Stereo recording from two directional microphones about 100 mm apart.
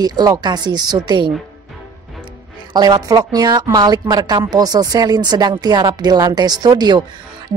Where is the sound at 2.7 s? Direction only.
40° right (ahead or behind).